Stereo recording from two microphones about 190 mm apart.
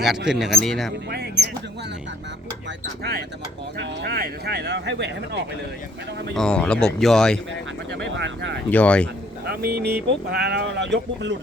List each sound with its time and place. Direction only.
0.3 s speech: centre (ahead or behind)
1.1 s speech: 60° right (ahead or behind)
3.0 s speech: 55° right (ahead or behind)
6.3 s speech: 5° left (ahead or behind)
7.9 s speech: 70° right (ahead or behind)
8.7 s speech: 5° left (ahead or behind)
9.5 s speech: 55° right (ahead or behind)